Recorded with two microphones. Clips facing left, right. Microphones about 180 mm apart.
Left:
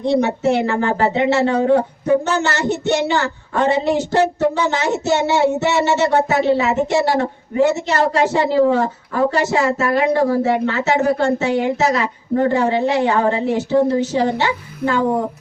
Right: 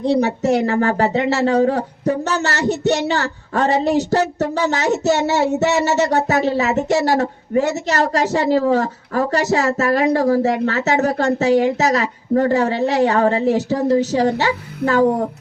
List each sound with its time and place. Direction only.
0.0 s speech: 40° right (ahead or behind)